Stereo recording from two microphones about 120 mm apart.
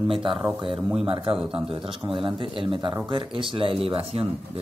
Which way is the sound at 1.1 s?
50° right (ahead or behind).